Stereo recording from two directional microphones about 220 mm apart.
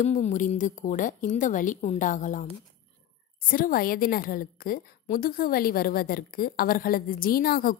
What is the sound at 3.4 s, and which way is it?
A woman's voice, 40° left (ahead or behind).